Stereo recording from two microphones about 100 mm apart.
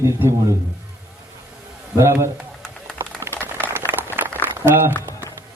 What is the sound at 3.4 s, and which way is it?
Boiling, 20° right (ahead or behind).